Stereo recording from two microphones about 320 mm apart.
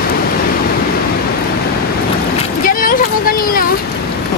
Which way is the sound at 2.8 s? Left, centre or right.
Left.